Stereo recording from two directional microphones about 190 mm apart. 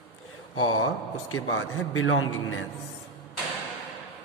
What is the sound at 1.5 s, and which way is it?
Speech, 90° left.